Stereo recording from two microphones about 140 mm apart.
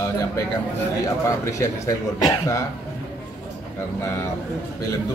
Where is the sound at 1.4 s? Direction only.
25° left (ahead or behind).